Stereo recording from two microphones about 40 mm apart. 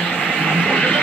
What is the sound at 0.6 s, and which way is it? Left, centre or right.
Music, left.